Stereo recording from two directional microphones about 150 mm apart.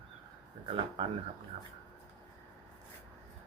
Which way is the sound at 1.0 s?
35° right (ahead or behind).